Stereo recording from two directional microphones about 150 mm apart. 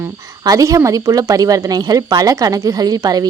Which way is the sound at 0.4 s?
20° right (ahead or behind).